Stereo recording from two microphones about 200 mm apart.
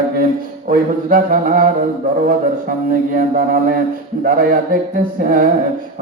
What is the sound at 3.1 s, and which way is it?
Wind instrument, 45° right (ahead or behind).